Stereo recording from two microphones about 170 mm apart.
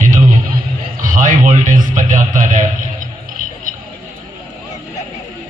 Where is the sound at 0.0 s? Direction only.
50° right (ahead or behind).